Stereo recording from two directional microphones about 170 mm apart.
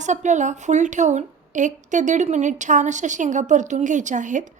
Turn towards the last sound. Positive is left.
turn(degrees=-45)  # may be behind; listen again after turning